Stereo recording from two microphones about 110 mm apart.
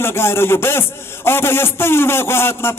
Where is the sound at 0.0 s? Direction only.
20° left (ahead or behind).